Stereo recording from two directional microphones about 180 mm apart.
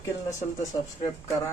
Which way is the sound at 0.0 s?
15° left (ahead or behind).